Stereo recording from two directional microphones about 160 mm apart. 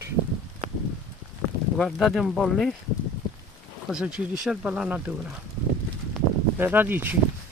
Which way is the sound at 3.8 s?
5° right (ahead or behind).